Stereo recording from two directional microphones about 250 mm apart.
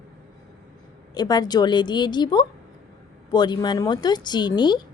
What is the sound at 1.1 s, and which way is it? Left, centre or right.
A woman's voice, centre.